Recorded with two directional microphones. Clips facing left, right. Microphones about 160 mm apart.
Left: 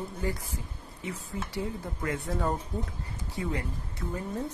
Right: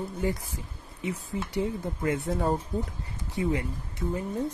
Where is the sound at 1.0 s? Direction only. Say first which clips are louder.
Right 4 dB; 20° right (ahead or behind).